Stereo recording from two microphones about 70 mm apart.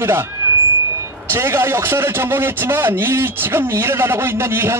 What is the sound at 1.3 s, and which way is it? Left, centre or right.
A man's voice, right.